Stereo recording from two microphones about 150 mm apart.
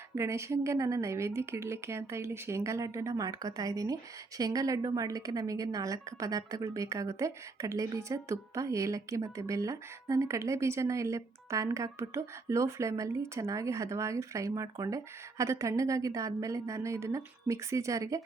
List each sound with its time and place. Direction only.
0.2 s a woman's voice: 20° right (ahead or behind)